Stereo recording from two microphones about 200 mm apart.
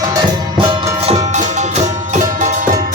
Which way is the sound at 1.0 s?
30° right (ahead or behind).